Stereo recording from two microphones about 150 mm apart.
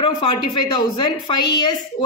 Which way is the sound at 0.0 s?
30° left (ahead or behind).